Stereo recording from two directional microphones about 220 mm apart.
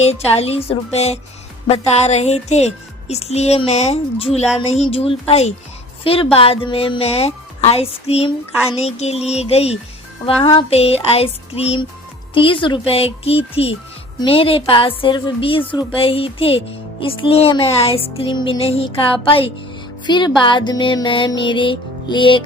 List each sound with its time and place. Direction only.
0.0 s a woman's voice: 30° left (ahead or behind)